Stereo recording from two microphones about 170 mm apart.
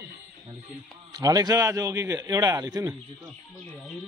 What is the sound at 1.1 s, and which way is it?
A man's voice, 20° right (ahead or behind).